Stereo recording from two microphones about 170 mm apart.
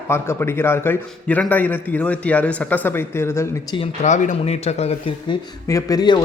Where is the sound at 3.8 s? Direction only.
45° left (ahead or behind).